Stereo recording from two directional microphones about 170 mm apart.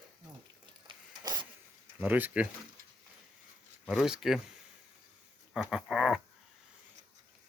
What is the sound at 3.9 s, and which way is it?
Speech, 5° right (ahead or behind).